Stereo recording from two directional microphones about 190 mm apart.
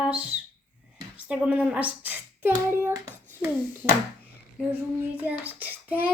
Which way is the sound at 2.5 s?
15° right (ahead or behind).